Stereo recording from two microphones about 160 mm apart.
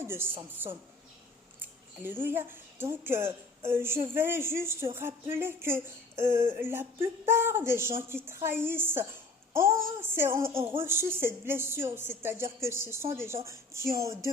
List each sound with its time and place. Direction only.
0.0 s a woman's voice: 15° right (ahead or behind)